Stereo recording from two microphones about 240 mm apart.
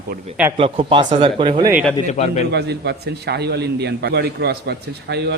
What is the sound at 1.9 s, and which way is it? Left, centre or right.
Speech, left.